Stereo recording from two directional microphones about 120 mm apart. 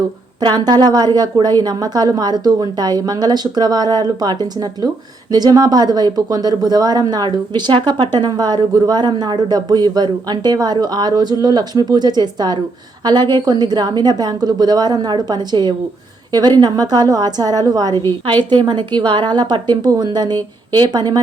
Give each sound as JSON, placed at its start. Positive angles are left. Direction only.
{"t": 0.4, "sound": "speech", "side_deg": -35}
{"t": 17.9, "sound": "a woman's voice", "side_deg": 20}
{"t": 18.5, "sound": "speech", "side_deg": -40}